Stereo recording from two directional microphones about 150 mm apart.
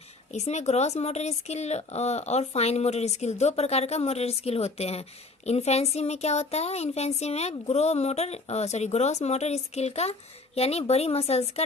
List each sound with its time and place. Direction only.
0.3 s speech: 45° left (ahead or behind)